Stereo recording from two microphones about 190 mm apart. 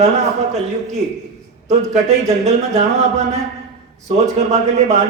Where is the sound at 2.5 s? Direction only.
35° right (ahead or behind).